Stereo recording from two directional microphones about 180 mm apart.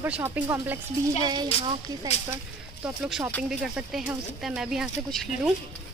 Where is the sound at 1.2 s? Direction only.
25° right (ahead or behind).